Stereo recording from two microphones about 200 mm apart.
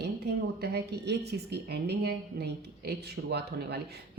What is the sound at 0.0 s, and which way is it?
A woman's voice, 55° right (ahead or behind).